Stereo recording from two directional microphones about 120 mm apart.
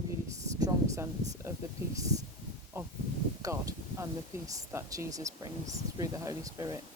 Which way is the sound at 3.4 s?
30° right (ahead or behind).